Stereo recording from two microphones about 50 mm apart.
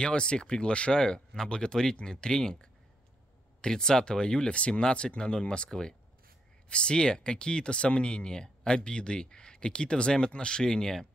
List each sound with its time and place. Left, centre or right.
0.0 s speech: centre